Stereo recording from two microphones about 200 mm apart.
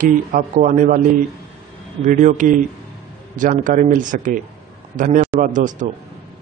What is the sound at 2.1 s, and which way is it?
A man's voice, 40° right (ahead or behind).